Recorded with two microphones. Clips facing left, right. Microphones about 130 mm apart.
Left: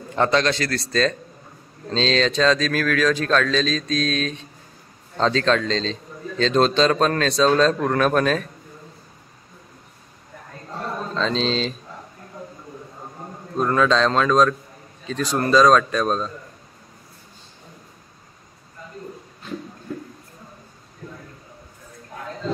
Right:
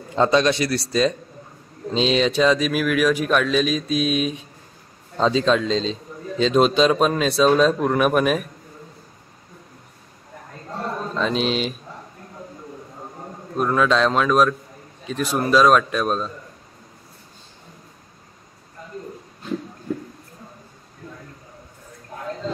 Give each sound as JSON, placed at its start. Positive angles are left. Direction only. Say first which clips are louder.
{"t": 0.1, "sound": "a man's voice", "louder": "right 2 dB", "side_deg": -15}
{"t": 11.1, "sound": "a man's voice", "louder": "even", "side_deg": -10}
{"t": 13.6, "sound": "a man's voice", "louder": "even", "side_deg": -5}